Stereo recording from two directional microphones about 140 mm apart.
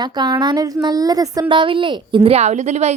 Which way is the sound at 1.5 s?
35° right (ahead or behind).